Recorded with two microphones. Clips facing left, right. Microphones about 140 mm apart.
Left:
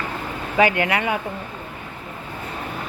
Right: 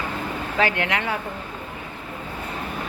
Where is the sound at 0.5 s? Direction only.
10° left (ahead or behind).